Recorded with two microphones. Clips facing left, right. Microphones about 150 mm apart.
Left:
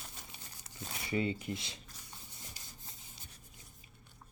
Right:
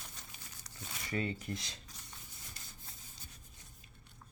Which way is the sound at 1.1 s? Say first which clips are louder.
Left 3 dB; 15° left (ahead or behind).